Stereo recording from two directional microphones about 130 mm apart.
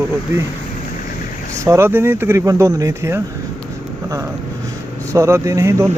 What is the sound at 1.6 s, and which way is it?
Speech, 20° right (ahead or behind).